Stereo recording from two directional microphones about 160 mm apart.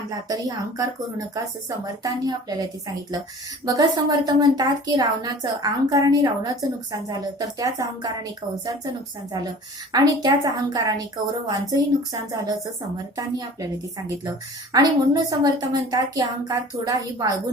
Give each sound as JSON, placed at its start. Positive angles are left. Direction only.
{"t": 0.3, "sound": "a woman's voice", "side_deg": -20}
{"t": 3.7, "sound": "a woman's voice", "side_deg": -25}
{"t": 9.9, "sound": "a woman's voice", "side_deg": -25}
{"t": 14.3, "sound": "a woman's voice", "side_deg": -25}